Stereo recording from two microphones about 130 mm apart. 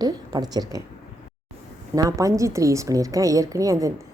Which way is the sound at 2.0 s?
25° right (ahead or behind).